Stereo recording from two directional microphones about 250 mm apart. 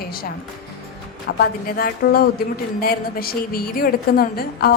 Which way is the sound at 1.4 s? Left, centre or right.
Left.